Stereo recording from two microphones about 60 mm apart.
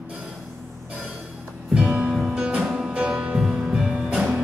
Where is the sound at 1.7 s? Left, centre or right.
Centre.